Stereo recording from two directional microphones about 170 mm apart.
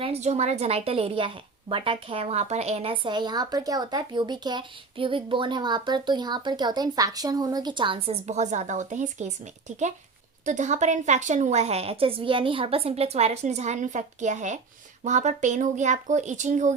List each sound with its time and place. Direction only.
0.0 s a woman's voice: 40° right (ahead or behind)